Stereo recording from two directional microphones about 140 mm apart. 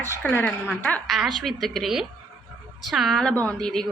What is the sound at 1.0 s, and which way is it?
Speech, centre (ahead or behind).